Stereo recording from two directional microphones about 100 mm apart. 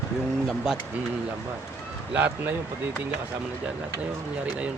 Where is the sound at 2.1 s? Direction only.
15° right (ahead or behind).